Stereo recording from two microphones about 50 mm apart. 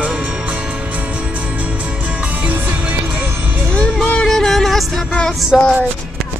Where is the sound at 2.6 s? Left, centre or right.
Right.